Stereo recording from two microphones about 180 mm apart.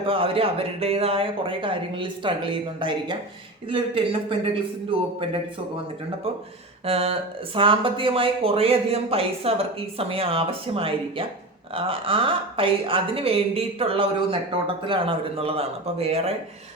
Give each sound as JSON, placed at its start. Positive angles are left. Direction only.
{"t": 0.0, "sound": "speech", "side_deg": -30}
{"t": 6.8, "sound": "speech", "side_deg": -35}